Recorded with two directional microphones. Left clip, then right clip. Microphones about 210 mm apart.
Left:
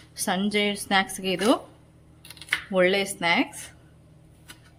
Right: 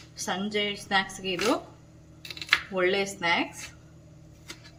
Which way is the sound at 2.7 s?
45° left (ahead or behind).